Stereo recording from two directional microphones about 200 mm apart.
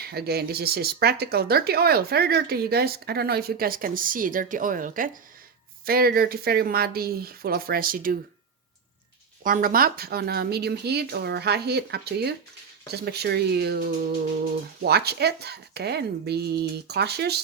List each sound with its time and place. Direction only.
0.0 s speech: 50° right (ahead or behind)
9.4 s speech: 45° right (ahead or behind)